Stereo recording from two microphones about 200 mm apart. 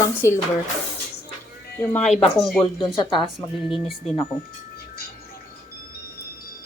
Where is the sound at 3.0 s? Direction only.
25° left (ahead or behind).